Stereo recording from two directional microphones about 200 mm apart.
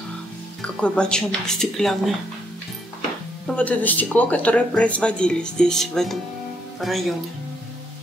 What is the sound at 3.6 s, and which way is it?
Speech, 10° left (ahead or behind).